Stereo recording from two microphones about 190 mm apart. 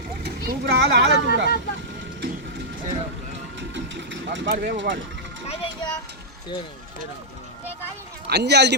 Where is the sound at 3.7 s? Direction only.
70° right (ahead or behind).